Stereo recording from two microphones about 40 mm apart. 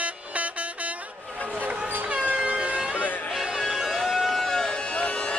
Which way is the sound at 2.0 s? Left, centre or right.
Right.